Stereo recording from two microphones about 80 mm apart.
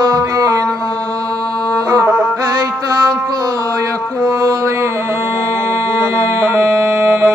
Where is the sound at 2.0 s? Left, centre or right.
Centre.